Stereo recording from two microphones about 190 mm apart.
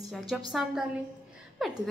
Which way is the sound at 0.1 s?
Centre (ahead or behind).